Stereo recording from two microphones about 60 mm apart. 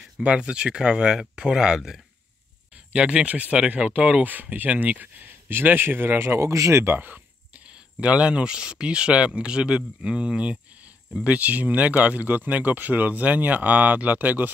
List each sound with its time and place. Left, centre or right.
0.2 s speech: centre
5.5 s speech: right
6.5 s speech: right
7.0 s a sound: right
7.6 s speech: centre